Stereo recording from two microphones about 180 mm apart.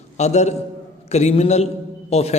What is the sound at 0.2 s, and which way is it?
A man's voice, 40° left (ahead or behind).